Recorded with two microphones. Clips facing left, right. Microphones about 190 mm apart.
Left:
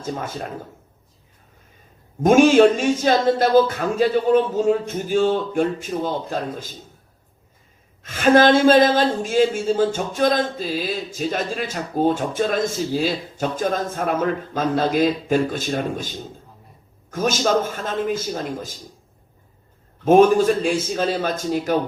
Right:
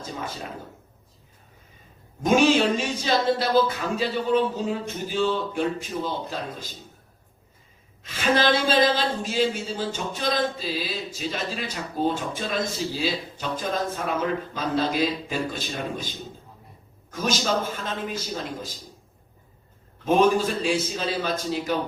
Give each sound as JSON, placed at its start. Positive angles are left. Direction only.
{"t": 2.2, "sound": "speech", "side_deg": 50}
{"t": 8.0, "sound": "speech", "side_deg": 50}
{"t": 20.1, "sound": "speech", "side_deg": 50}